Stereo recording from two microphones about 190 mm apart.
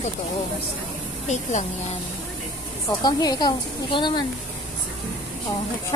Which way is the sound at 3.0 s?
20° left (ahead or behind).